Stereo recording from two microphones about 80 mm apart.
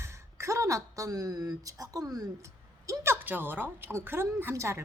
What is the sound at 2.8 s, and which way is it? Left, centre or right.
A woman's voice, right.